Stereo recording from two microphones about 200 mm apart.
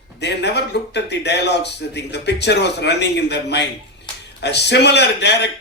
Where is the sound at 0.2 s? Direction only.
60° left (ahead or behind).